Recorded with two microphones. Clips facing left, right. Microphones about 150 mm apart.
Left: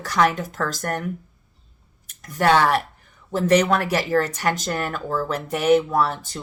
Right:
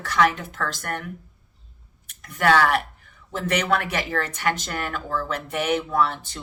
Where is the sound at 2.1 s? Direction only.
35° left (ahead or behind).